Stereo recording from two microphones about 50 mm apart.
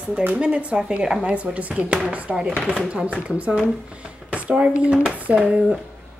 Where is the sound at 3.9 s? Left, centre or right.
Right.